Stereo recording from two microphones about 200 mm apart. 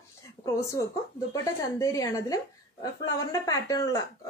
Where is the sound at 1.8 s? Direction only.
15° left (ahead or behind).